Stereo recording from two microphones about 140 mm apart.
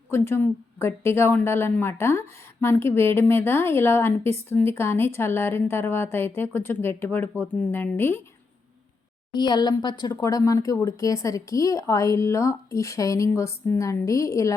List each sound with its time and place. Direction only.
0.1 s speech: 15° left (ahead or behind)
9.3 s speech: 30° left (ahead or behind)